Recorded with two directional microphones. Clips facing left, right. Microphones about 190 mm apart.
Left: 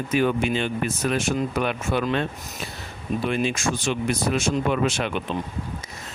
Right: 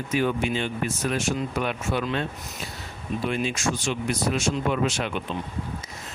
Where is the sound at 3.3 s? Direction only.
60° left (ahead or behind).